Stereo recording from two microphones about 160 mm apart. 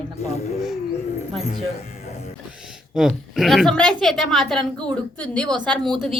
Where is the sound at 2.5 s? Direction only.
5° right (ahead or behind).